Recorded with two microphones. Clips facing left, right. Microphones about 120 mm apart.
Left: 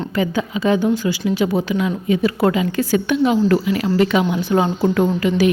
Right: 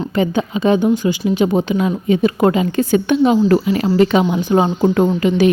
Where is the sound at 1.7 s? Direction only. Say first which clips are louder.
Right 3 dB; 35° right (ahead or behind).